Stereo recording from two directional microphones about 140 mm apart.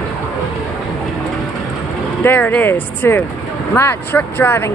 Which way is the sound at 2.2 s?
15° left (ahead or behind).